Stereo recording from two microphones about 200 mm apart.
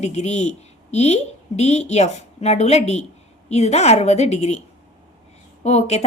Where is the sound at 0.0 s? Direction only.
35° left (ahead or behind).